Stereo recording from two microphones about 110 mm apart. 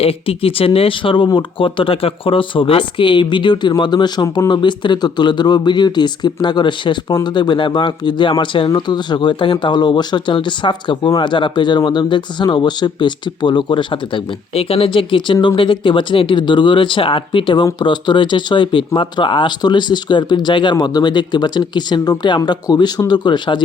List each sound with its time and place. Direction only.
0.0 s speech: 60° left (ahead or behind); by 23.6 s 45° left (ahead or behind)